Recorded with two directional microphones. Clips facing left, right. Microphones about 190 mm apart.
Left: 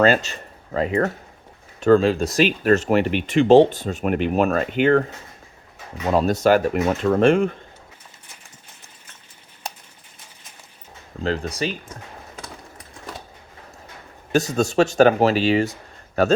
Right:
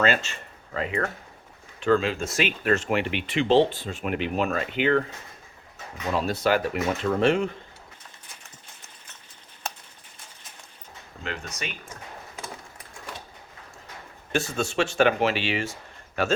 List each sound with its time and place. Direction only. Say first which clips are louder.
0.0 s speech: left 7 dB; 40° left (ahead or behind)
6.1 s speech: left 7 dB; 45° left (ahead or behind)
11.2 s speech: left 11 dB; 35° left (ahead or behind)
14.3 s speech: left 7 dB; 40° left (ahead or behind)